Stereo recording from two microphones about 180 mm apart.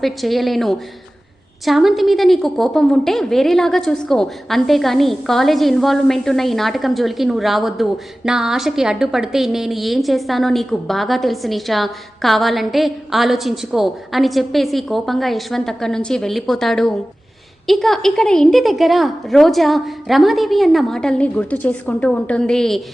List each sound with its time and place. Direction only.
0.0 s a woman's voice: centre (ahead or behind)